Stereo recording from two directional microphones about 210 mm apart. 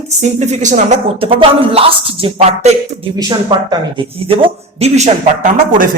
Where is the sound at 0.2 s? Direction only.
35° right (ahead or behind).